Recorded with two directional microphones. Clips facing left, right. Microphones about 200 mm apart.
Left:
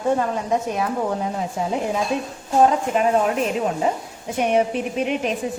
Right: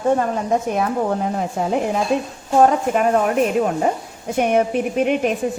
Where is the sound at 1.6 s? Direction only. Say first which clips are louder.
Right 2 dB; 60° right (ahead or behind).